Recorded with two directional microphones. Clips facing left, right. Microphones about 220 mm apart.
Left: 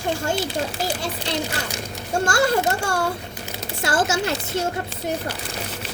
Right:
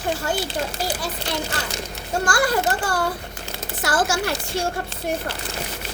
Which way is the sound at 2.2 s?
25° left (ahead or behind).